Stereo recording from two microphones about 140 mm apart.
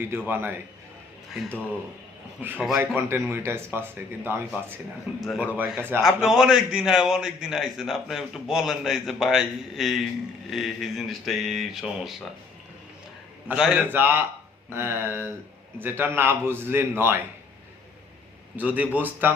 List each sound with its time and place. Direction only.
0.3 s speech: 15° right (ahead or behind)
2.4 s a man's voice: 15° right (ahead or behind)
13.6 s speech: 5° right (ahead or behind)
18.5 s speech: 10° right (ahead or behind)